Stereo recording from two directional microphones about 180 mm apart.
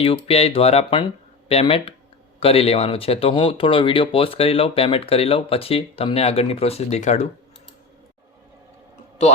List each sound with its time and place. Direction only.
0.0 s speech: 35° left (ahead or behind)